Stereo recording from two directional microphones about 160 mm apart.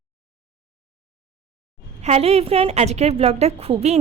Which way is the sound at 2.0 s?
40° right (ahead or behind).